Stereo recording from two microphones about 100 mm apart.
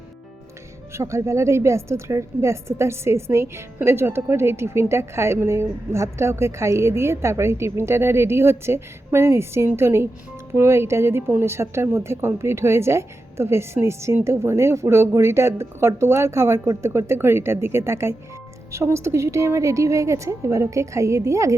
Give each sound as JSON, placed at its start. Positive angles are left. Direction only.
{"t": 0.9, "sound": "a woman's voice", "side_deg": -30}